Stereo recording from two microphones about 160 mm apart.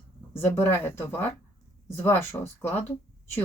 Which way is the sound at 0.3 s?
15° left (ahead or behind).